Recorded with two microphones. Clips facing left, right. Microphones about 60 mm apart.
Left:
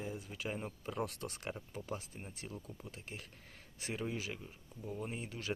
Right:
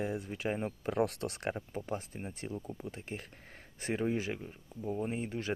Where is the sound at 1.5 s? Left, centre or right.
Right.